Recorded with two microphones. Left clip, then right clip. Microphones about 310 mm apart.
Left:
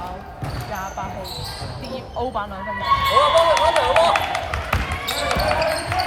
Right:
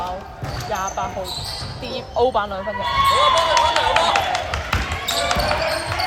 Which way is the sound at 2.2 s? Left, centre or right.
Right.